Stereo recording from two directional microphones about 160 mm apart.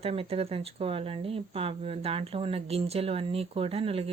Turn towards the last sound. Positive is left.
turn(degrees=-35)  # may be behind; listen again after turning